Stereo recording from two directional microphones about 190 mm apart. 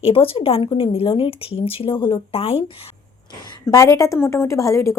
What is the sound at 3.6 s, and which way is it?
A woman's voice, 15° left (ahead or behind).